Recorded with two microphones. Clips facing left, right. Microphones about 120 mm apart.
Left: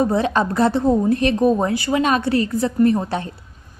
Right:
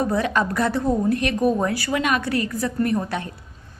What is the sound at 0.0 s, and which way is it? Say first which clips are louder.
A woman's voice: left 3 dB; 25° left (ahead or behind).